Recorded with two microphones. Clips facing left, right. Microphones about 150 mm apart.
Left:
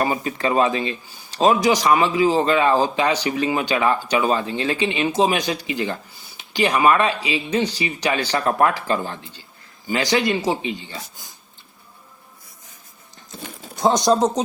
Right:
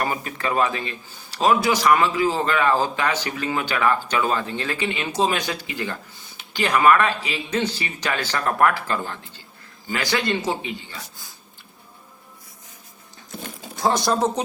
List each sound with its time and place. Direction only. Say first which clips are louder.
0.0 s a man's voice: left 4 dB; 20° left (ahead or behind)
13.7 s speech: left 4 dB; 20° left (ahead or behind)